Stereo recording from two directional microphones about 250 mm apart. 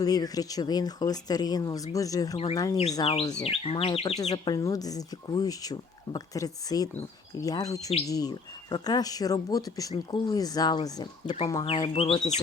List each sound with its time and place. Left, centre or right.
0.0 s chirp: centre
11.6 s speech: left